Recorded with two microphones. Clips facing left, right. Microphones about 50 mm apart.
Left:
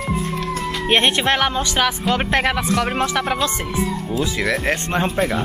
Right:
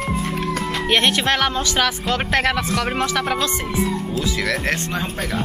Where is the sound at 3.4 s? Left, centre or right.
Left.